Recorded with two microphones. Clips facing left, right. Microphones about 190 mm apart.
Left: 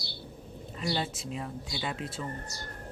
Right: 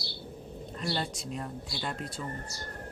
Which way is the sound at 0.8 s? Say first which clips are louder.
Left 2 dB; 5° left (ahead or behind).